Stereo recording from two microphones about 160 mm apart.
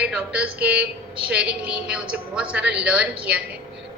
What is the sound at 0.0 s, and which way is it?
A woman's voice, 5° right (ahead or behind).